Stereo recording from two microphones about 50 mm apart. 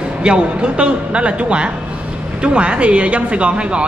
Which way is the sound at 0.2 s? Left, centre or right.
Centre.